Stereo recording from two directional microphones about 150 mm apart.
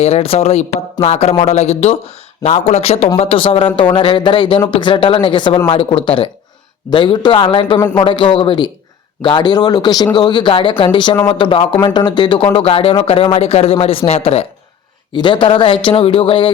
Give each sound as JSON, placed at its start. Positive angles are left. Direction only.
{"t": 0.0, "sound": "speech", "side_deg": 40}
{"t": 15.1, "sound": "speech", "side_deg": 30}